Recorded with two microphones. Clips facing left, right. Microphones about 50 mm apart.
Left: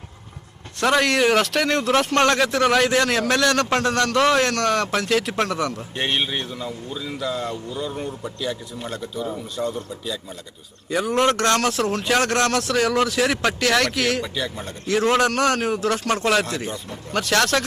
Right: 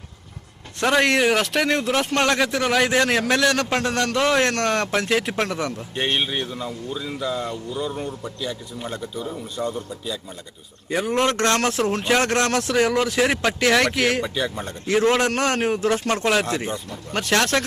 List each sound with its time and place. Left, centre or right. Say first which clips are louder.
0.8 s a man's voice: even; centre
1.2 s a man's voice: left 1 dB; centre
2.8 s a man's voice: even; centre
4.4 s speech: even; right
5.3 s a man's voice: left 1 dB; centre
5.7 s a man's voice: even; centre
10.8 s speech: left 1 dB; right
14.6 s a man's voice: right 1 dB; right
16.2 s a man's voice: left 2 dB; centre
16.5 s speech: right 2 dB; right